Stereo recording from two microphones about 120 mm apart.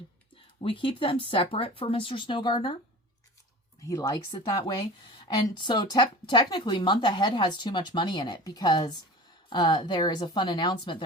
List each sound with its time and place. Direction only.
0.6 s speech: 45° left (ahead or behind)
3.8 s speech: 25° left (ahead or behind)
5.3 s speech: 45° left (ahead or behind)